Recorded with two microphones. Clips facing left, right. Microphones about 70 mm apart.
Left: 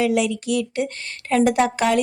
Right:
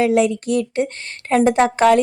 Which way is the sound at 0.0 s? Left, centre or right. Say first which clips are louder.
Right 4 dB; right.